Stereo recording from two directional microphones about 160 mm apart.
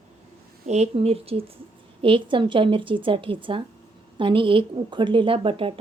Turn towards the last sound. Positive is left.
turn(degrees=-35)  # may be behind; listen again after turning